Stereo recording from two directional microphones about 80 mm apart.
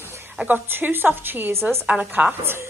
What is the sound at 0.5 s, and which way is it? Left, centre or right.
A woman's voice, right.